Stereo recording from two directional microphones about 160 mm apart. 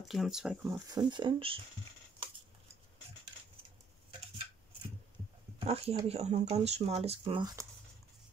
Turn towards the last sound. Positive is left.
turn(degrees=-40)  # may be behind; listen again after turning